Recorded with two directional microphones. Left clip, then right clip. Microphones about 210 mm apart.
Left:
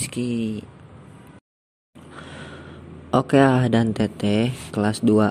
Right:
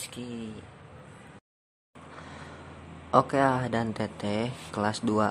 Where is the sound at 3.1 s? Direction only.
20° left (ahead or behind).